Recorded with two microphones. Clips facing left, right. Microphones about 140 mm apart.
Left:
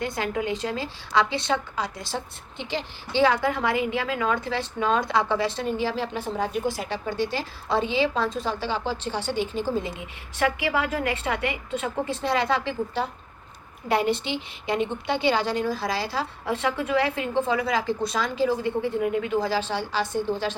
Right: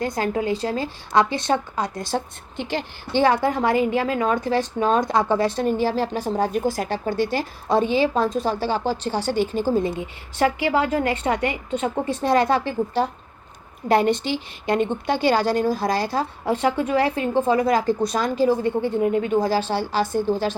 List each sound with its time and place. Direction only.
0.0 s a woman's voice: 40° right (ahead or behind)
1.1 s a woman's voice: 45° right (ahead or behind)
12.3 s a woman's voice: 45° right (ahead or behind)
13.8 s a woman's voice: 30° right (ahead or behind)
14.8 s a woman's voice: 45° right (ahead or behind)
16.5 s a woman's voice: 30° right (ahead or behind)
18.8 s a woman's voice: 30° right (ahead or behind)
19.4 s a woman's voice: 45° right (ahead or behind)